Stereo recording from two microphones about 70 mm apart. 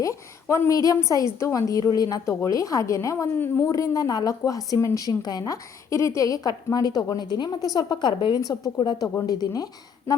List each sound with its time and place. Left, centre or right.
0.0 s a woman's voice: left
0.7 s a woman's voice: left
1.4 s a woman's voice: left
2.2 s speech: left
3.3 s speech: left
3.7 s a woman's voice: left
5.9 s a woman's voice: left